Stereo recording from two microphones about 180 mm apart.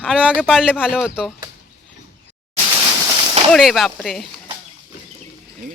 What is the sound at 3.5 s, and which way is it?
Speech, centre (ahead or behind).